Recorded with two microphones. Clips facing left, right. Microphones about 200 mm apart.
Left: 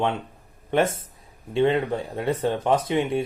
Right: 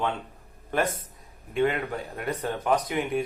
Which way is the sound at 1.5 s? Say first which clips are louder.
Left 5 dB; 30° left (ahead or behind).